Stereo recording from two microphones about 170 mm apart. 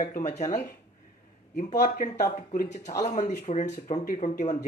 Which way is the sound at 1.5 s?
45° left (ahead or behind).